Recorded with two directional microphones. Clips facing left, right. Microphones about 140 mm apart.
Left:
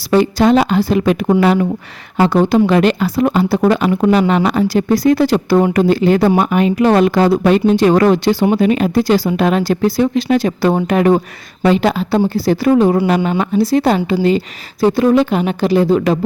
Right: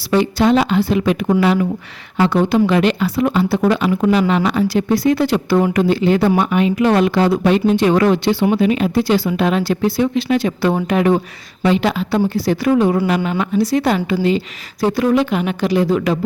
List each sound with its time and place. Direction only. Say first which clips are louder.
0.0 s speech: left 3 dB; 40° left (ahead or behind)
14.8 s speech: left 3 dB; 30° left (ahead or behind)